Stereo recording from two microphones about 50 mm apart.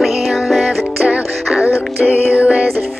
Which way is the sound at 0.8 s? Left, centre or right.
Right.